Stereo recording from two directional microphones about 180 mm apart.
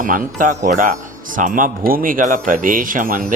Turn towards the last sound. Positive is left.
turn(degrees=-50)  # may be behind; listen again after turning